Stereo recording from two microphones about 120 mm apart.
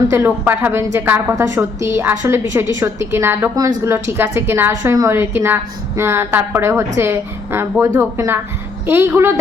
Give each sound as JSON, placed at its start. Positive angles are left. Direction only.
{"t": 0.1, "sound": "a woman's voice", "side_deg": -20}